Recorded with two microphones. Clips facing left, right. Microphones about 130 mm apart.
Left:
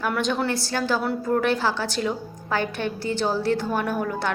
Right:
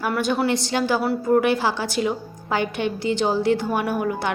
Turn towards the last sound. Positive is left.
turn(degrees=-10)  # may be behind; listen again after turning